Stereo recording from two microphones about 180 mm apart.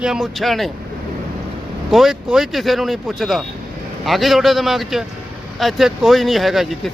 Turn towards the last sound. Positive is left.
turn(degrees=0)  # may be behind; listen again after turning